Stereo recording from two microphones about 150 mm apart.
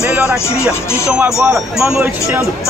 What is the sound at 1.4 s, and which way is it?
Speech, 5° right (ahead or behind).